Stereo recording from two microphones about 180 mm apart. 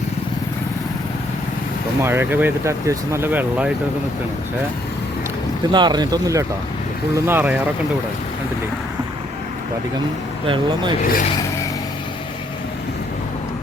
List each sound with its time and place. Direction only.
2.0 s speech: 10° right (ahead or behind)
5.7 s speech: 25° right (ahead or behind)
10.4 s speech: 25° right (ahead or behind)